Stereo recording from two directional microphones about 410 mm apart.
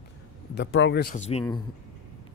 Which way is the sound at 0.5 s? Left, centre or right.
Left.